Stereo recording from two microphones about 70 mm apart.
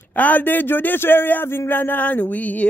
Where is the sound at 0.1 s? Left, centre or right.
Left.